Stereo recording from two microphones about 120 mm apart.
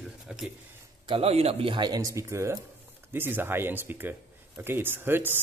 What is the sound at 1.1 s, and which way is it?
Speech, 55° right (ahead or behind).